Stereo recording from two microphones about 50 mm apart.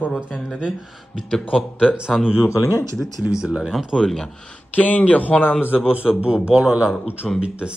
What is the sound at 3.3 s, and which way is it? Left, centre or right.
Speech, centre.